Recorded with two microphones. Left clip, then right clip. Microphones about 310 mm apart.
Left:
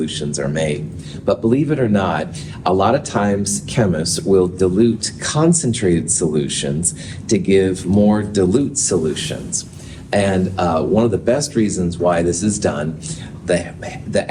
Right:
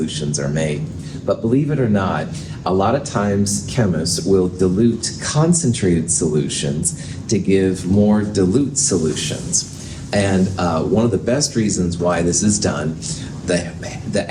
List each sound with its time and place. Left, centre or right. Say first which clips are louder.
0.0 s a man's voice: left 1 dB; left